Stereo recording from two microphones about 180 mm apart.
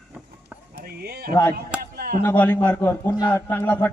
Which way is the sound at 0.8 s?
60° right (ahead or behind).